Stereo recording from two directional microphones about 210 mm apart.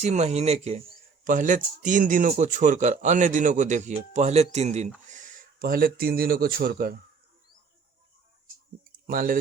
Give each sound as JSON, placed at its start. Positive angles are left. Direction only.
{"t": 0.0, "sound": "speech", "side_deg": -35}
{"t": 9.0, "sound": "speech", "side_deg": -40}